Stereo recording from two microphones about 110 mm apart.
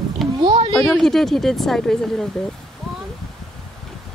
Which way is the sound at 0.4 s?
45° right (ahead or behind).